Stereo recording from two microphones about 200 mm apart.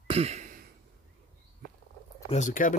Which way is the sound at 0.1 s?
30° right (ahead or behind).